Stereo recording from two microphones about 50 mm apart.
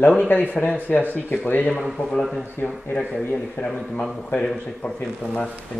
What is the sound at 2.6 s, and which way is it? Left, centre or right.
Speech, left.